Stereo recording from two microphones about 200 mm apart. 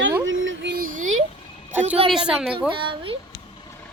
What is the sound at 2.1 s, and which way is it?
Speech, 5° right (ahead or behind).